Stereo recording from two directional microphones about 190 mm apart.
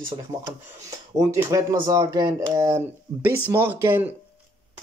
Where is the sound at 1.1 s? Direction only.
15° right (ahead or behind).